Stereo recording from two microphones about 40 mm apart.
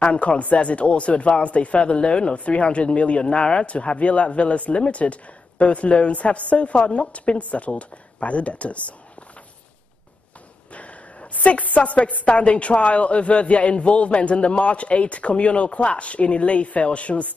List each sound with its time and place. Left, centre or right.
0.0 s a woman's voice: left
10.7 s a woman's voice: left